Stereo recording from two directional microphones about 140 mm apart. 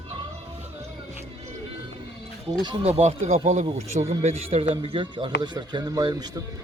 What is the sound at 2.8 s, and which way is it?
Speech, 45° right (ahead or behind).